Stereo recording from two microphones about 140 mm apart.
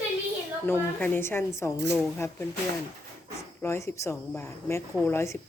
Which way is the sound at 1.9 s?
Centre (ahead or behind).